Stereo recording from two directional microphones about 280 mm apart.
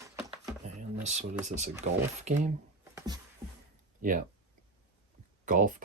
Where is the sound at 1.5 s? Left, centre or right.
Right.